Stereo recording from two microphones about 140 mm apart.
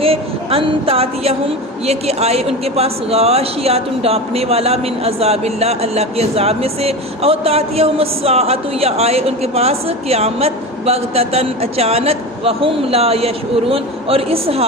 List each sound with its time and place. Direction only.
0.0 s a woman's voice: 45° right (ahead or behind)